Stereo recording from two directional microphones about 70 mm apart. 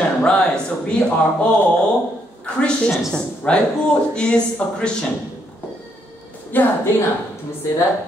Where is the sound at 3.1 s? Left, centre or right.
Centre.